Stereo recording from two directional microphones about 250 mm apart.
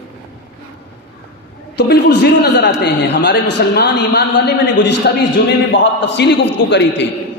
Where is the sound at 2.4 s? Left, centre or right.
Left.